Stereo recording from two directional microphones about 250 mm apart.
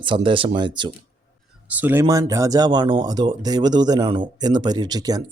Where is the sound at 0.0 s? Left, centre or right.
Centre.